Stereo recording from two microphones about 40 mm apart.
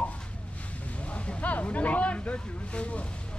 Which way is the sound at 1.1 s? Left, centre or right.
Left.